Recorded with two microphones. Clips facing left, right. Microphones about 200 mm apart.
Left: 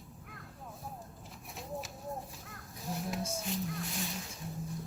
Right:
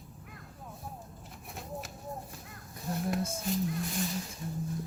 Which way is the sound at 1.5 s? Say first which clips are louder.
Even; centre (ahead or behind).